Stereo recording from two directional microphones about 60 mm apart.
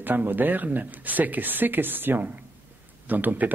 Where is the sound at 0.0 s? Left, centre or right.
Right.